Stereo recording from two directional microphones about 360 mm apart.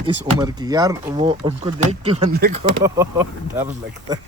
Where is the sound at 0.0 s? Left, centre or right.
Centre.